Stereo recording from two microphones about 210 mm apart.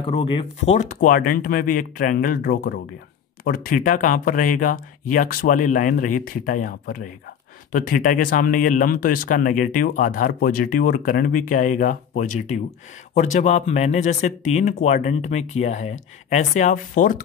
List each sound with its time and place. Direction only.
0.0 s speech: 25° left (ahead or behind)